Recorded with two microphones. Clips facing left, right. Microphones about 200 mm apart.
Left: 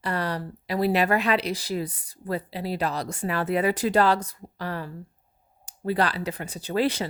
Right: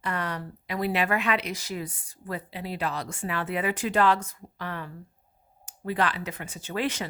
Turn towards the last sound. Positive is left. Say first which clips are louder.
# left 5 dB
turn(degrees=35)  # may be behind; listen again after turning